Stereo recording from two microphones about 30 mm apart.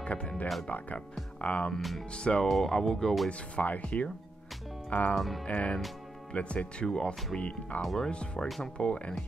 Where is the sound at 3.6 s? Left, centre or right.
Left.